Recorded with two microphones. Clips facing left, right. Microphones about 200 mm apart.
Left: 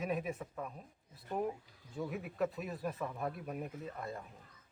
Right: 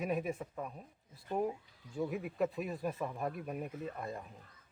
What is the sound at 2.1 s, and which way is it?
Speech, centre (ahead or behind).